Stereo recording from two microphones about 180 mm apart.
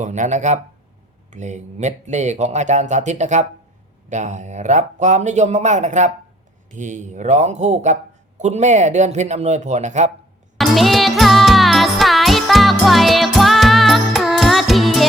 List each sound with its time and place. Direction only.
0.0 s speech: 40° right (ahead or behind)
10.6 s music: centre (ahead or behind)